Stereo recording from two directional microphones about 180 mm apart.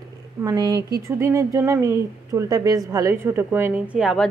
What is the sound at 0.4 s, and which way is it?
Speech, 20° right (ahead or behind).